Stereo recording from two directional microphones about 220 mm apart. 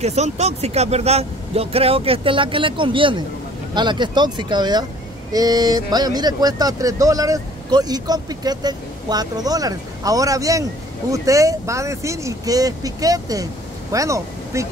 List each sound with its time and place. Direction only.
0.0 s speech: 30° right (ahead or behind); by 14.7 s 15° right (ahead or behind)